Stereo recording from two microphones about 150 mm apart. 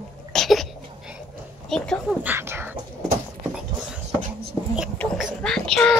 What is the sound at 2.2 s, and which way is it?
Speech, 15° right (ahead or behind).